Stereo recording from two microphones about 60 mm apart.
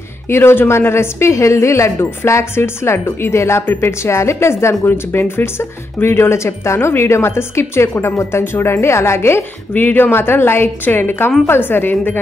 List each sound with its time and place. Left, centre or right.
0.3 s a woman's voice: left
9.8 s a woman's voice: left